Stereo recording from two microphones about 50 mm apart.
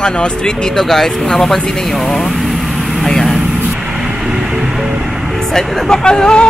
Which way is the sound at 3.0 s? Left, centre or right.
Centre.